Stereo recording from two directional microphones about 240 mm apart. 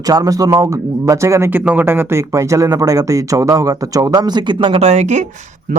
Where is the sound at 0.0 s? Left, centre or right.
Centre.